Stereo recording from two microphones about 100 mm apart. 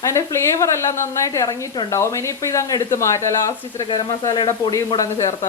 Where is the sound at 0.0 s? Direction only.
30° left (ahead or behind).